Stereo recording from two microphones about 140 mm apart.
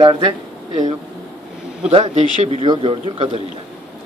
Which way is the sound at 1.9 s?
40° right (ahead or behind).